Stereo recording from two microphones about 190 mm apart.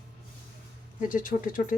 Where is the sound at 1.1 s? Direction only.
45° left (ahead or behind).